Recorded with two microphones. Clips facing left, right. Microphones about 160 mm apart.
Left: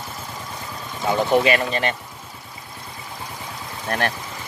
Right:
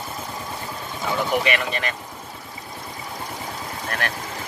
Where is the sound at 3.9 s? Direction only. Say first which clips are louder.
Left 5 dB; 30° left (ahead or behind).